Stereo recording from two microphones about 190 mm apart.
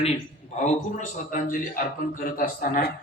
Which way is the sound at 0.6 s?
40° left (ahead or behind).